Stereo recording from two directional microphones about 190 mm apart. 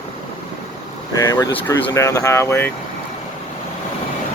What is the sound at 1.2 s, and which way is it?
Speech, 15° left (ahead or behind).